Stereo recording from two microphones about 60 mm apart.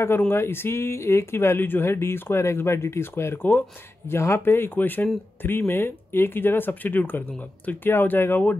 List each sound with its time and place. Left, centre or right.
0.3 s speech: left
4.5 s speech: left